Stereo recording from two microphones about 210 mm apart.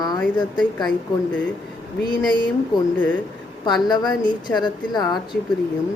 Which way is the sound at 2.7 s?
20° left (ahead or behind).